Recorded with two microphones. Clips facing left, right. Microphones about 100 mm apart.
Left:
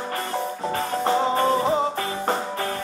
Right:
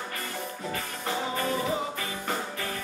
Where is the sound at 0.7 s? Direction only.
35° left (ahead or behind).